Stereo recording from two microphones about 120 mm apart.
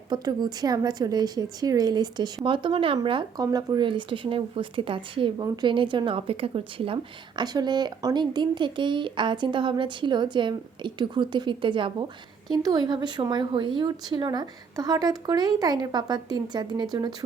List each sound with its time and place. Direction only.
0.1 s speech: 35° right (ahead or behind)
7.4 s speech: 35° right (ahead or behind)